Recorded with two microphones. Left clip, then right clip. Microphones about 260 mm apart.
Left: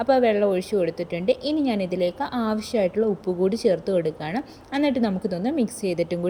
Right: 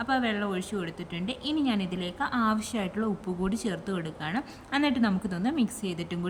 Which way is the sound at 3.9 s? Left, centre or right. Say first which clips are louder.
Left 9 dB; centre.